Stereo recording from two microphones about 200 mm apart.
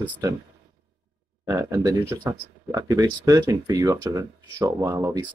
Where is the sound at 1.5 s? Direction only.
15° right (ahead or behind).